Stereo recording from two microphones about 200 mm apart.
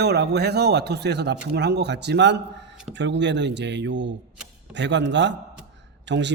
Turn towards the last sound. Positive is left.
turn(degrees=-60)  # may be behind; listen again after turning